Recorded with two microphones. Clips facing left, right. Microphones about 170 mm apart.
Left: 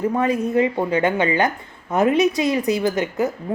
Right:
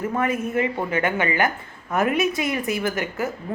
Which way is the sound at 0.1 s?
20° left (ahead or behind).